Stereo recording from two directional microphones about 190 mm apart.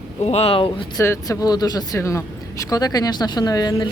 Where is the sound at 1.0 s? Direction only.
15° left (ahead or behind).